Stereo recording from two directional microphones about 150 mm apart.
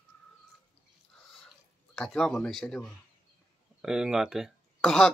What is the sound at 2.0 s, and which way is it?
Speech, 5° left (ahead or behind).